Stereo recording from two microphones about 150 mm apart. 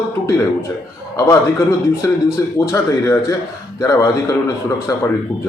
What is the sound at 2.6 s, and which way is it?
A man's voice, 20° left (ahead or behind).